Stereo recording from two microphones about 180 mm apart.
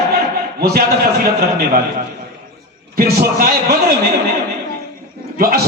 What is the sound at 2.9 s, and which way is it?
A man's voice, 60° right (ahead or behind).